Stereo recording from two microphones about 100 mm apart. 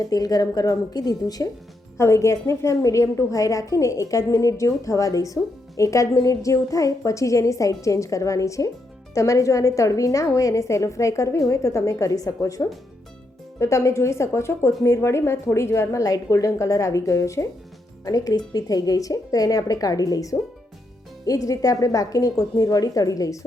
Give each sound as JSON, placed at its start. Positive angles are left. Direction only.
{"t": 0.0, "sound": "a woman's voice", "side_deg": 40}
{"t": 2.0, "sound": "a woman's voice", "side_deg": 30}